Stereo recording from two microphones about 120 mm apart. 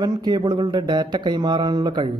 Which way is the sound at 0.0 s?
35° right (ahead or behind).